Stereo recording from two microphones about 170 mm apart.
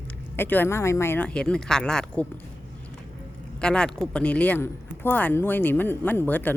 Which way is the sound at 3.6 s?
5° left (ahead or behind).